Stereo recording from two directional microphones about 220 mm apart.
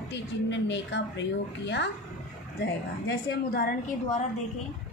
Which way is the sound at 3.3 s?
45° left (ahead or behind).